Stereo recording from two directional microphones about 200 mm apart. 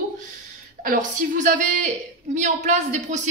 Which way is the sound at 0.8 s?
40° right (ahead or behind).